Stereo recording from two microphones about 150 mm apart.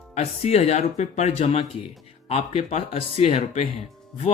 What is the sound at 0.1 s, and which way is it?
Speech, 45° left (ahead or behind).